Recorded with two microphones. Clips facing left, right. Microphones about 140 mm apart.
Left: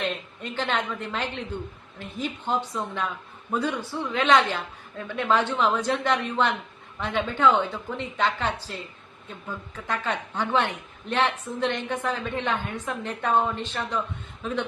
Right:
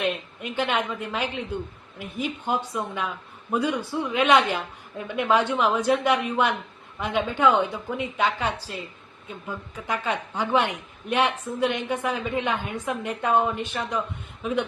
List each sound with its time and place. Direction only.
0.0 s a woman's voice: 10° right (ahead or behind)